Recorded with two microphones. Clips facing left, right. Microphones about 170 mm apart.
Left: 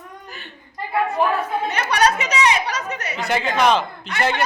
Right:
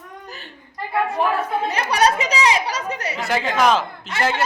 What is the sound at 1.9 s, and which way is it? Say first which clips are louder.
Speech: right 1 dB; 30° right (ahead or behind).